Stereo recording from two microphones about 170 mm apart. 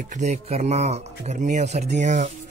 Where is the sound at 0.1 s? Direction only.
45° right (ahead or behind).